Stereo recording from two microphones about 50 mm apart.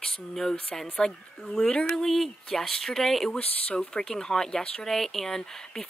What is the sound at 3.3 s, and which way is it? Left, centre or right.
Speech, left.